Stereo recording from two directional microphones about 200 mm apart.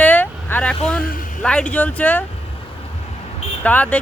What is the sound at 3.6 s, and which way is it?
Speech, 10° left (ahead or behind).